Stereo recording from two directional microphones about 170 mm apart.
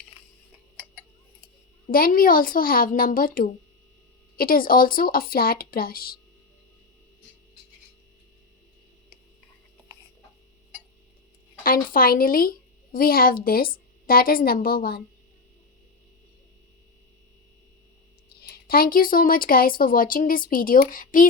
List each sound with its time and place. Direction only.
1.9 s a woman's voice: 60° left (ahead or behind)
11.6 s a woman's voice: 60° left (ahead or behind)
18.3 s a woman's voice: 65° left (ahead or behind)